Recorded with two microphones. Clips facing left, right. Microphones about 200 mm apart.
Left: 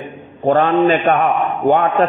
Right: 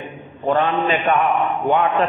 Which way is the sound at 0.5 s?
45° left (ahead or behind).